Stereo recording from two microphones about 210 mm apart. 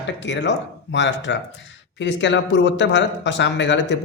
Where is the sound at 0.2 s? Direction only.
60° left (ahead or behind).